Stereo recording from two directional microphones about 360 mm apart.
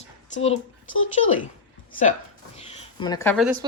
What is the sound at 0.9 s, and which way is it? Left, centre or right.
Speech, left.